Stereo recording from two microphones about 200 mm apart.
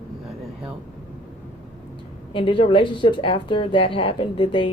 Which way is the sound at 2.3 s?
25° left (ahead or behind).